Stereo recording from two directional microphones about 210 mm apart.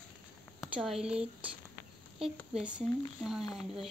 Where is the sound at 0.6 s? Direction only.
Centre (ahead or behind).